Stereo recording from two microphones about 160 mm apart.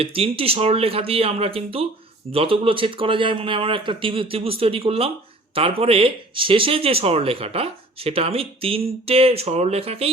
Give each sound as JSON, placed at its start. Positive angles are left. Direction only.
{"t": 0.0, "sound": "speech", "side_deg": -35}